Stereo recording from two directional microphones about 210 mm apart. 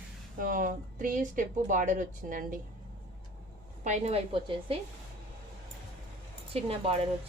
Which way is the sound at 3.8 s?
30° right (ahead or behind).